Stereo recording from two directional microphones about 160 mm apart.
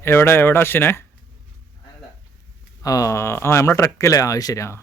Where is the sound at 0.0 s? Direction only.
15° left (ahead or behind).